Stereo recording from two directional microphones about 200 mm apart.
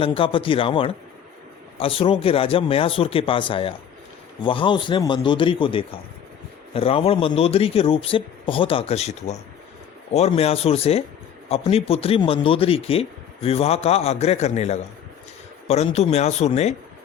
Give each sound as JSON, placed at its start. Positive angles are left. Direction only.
{"t": 0.0, "sound": "a man's voice", "side_deg": 25}